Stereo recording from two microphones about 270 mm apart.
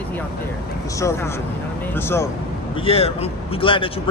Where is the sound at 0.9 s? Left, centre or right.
Centre.